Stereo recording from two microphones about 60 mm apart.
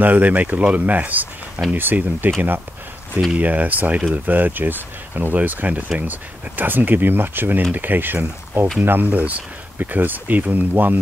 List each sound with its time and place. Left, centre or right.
0.0 s speech: right